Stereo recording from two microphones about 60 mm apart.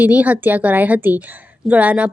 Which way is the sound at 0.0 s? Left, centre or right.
Right.